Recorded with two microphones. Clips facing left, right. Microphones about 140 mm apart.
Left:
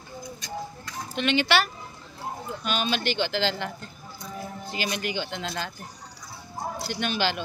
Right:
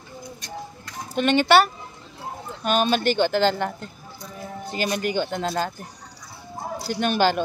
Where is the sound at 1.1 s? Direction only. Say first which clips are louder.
Right 6 dB; 45° right (ahead or behind).